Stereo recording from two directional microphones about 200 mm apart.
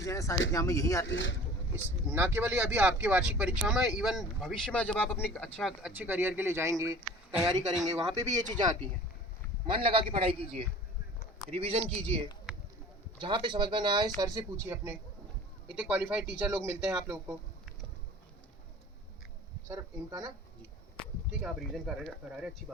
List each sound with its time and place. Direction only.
0.0 s speech: 15° left (ahead or behind)
1.0 s speech: 70° left (ahead or behind)
2.0 s speech: 10° right (ahead or behind); by 5.5 s 10° left (ahead or behind)
5.5 s speech: centre (ahead or behind)
8.1 s speech: 35° right (ahead or behind)
8.4 s speech: 20° right (ahead or behind)
19.6 s speech: 15° right (ahead or behind)
21.4 s speech: centre (ahead or behind)